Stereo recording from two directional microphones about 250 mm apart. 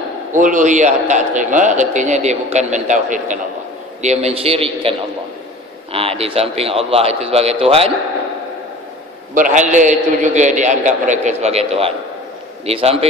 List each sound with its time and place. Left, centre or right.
0.3 s a man's voice: right
9.3 s a man's voice: right